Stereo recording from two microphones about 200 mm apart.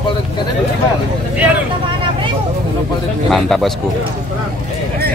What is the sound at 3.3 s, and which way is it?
Speech, centre (ahead or behind).